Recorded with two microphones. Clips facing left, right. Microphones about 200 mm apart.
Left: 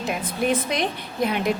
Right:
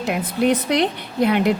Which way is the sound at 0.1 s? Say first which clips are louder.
Right 5 dB; 65° right (ahead or behind).